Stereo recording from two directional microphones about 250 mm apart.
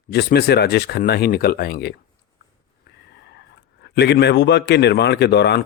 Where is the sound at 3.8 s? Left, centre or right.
Left.